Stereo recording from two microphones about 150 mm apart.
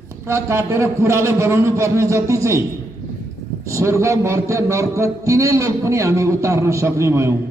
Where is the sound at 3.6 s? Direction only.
20° right (ahead or behind).